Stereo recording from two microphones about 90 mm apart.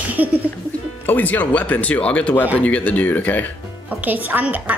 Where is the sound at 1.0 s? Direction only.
20° left (ahead or behind).